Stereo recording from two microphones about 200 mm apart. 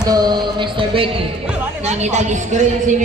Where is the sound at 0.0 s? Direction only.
20° right (ahead or behind).